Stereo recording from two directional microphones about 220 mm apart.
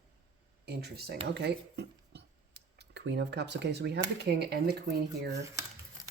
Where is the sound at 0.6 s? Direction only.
45° right (ahead or behind).